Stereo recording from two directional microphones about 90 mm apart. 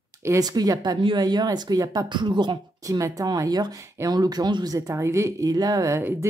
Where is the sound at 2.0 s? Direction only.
60° right (ahead or behind).